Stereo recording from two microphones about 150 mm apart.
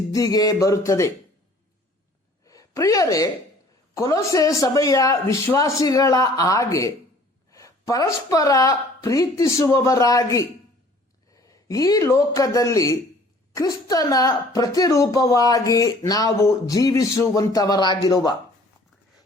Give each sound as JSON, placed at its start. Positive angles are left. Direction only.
{"t": 0.1, "sound": "a woman's voice", "side_deg": 25}
{"t": 2.4, "sound": "a sound", "side_deg": 20}
{"t": 3.9, "sound": "a woman's voice", "side_deg": 20}